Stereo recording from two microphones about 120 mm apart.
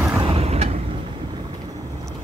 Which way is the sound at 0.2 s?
55° right (ahead or behind).